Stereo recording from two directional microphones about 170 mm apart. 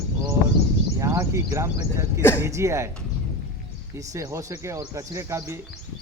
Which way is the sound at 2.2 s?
15° left (ahead or behind).